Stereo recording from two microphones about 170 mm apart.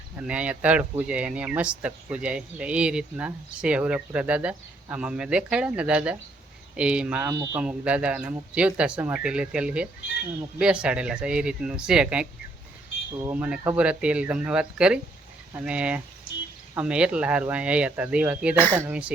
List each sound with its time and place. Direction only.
0.2 s speech: 5° right (ahead or behind)
7.3 s speech: 20° right (ahead or behind)
7.6 s speech: 5° right (ahead or behind)